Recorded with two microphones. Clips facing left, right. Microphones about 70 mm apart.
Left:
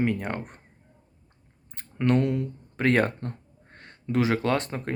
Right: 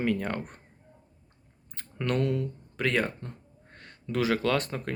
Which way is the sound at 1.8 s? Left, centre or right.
Left.